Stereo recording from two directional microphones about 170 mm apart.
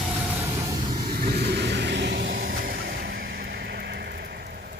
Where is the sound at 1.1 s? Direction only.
65° right (ahead or behind); by 2.4 s 90° right.